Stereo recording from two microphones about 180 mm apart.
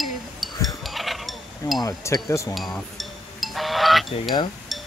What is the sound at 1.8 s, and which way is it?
Speech, 20° left (ahead or behind).